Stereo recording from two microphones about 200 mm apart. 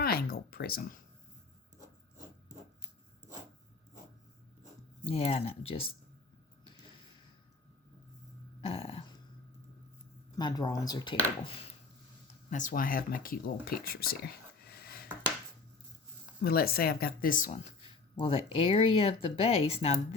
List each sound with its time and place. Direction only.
0.0 s a sound: 50° left (ahead or behind)
5.0 s speech: 30° left (ahead or behind)
8.6 s speech: 25° left (ahead or behind)
10.3 s speech: 20° left (ahead or behind)
12.5 s speech: 40° left (ahead or behind)
14.7 s a sound: 50° left (ahead or behind)
16.4 s speech: 50° left (ahead or behind)
18.2 s speech: 30° left (ahead or behind)